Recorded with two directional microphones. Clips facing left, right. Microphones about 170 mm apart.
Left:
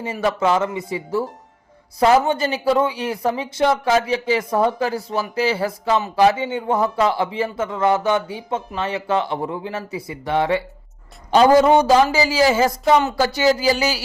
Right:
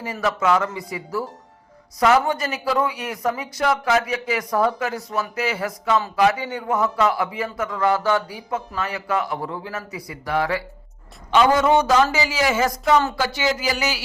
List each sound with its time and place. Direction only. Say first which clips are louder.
0.0 s a man's voice: left 3 dB; 25° left (ahead or behind)
11.3 s speech: left 4 dB; 35° left (ahead or behind)
13.1 s speech: left 6 dB; 40° left (ahead or behind)